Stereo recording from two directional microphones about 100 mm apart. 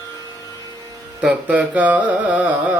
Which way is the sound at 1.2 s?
15° right (ahead or behind).